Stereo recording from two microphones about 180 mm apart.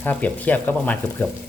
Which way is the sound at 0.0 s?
10° left (ahead or behind).